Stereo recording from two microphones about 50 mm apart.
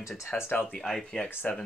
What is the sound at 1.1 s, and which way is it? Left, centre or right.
Speech, centre.